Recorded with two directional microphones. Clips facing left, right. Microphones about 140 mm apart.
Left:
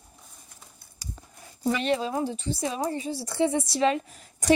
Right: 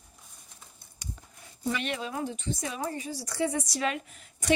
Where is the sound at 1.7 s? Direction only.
35° left (ahead or behind).